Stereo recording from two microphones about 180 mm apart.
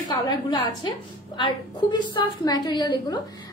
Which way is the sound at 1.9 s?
25° left (ahead or behind).